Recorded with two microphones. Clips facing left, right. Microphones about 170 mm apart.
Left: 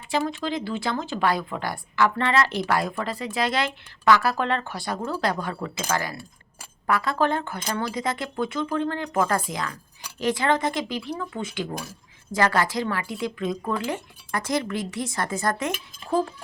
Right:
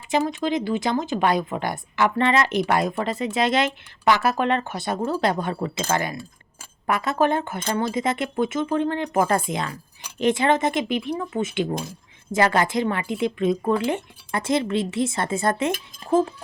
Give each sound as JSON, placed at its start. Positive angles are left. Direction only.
{"t": 0.1, "sound": "speech", "side_deg": -20}